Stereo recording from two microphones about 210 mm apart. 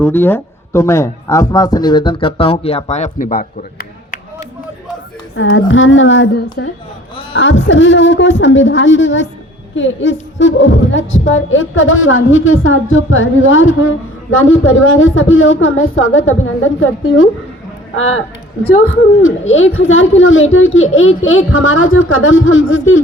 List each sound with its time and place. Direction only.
0.0 s a man's voice: 10° left (ahead or behind); by 4.4 s 40° left (ahead or behind)
5.4 s speech: 65° left (ahead or behind)
7.7 s a woman's voice: 65° left (ahead or behind)
19.2 s speech: 70° left (ahead or behind)